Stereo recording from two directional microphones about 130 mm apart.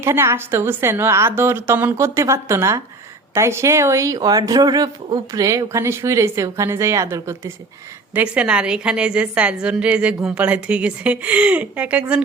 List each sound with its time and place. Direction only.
0.0 s speech: 20° right (ahead or behind)
8.1 s a woman's voice: 10° right (ahead or behind)